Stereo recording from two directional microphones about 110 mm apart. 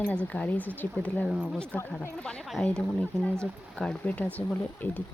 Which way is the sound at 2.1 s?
10° left (ahead or behind).